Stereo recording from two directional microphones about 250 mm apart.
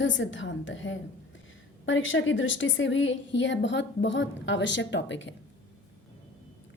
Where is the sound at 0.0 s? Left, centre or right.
Left.